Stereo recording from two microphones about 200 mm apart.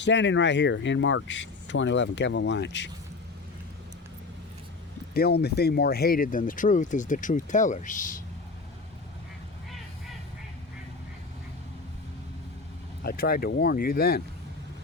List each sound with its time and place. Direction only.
0.0 s speech: 65° left (ahead or behind)
5.1 s speech: 55° left (ahead or behind)
13.0 s speech: 50° left (ahead or behind)